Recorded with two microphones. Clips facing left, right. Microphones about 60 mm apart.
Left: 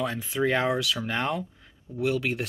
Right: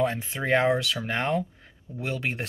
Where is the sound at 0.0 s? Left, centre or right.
Right.